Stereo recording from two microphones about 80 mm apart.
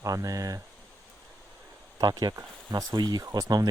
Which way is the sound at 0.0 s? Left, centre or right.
Right.